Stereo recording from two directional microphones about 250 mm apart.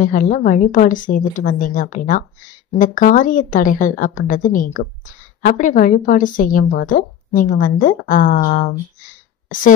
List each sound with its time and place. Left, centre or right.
0.0 s a woman's voice: left